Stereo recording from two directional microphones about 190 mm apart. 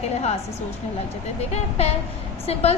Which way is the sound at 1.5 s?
35° left (ahead or behind).